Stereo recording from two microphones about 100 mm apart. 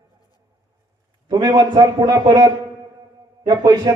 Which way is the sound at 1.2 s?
45° right (ahead or behind).